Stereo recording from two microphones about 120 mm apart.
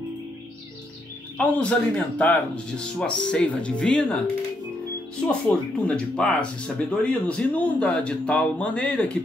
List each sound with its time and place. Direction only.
1.4 s speech: 10° left (ahead or behind)
5.5 s speech: 10° left (ahead or behind)